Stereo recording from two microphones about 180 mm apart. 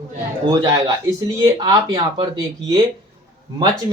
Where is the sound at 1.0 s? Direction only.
20° right (ahead or behind).